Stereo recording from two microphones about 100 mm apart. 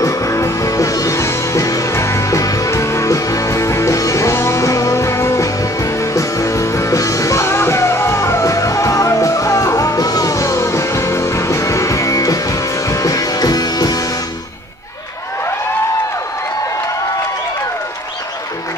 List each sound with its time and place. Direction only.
0.0 s music: 35° left (ahead or behind)